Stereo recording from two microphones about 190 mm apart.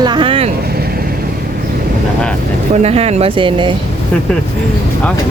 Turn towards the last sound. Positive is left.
turn(degrees=-25)  # may be behind; listen again after turning